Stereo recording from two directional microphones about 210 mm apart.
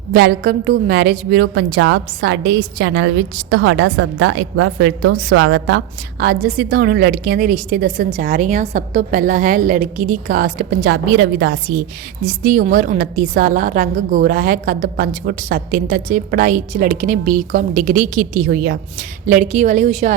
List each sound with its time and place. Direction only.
0.1 s a woman's voice: 45° right (ahead or behind)
12.2 s a woman's voice: 40° right (ahead or behind)